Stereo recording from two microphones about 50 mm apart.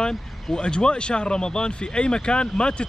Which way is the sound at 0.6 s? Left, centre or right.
Centre.